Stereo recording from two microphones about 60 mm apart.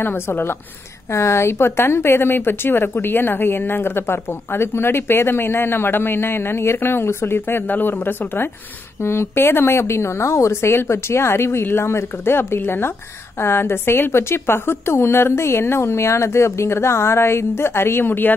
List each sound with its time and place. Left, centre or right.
0.0 s speech: left
1.1 s a woman's voice: left